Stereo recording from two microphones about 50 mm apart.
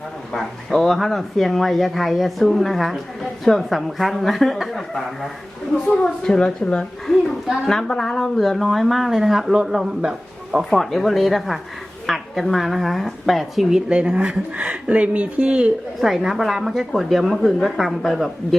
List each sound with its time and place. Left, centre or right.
0.3 s speech: centre
6.0 s speech: centre
10.7 s speech: centre
13.7 s a woman's voice: centre
16.0 s speech: centre